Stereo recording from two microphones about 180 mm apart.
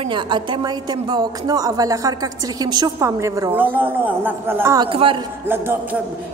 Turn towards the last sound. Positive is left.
turn(degrees=-10)  # may be behind; listen again after turning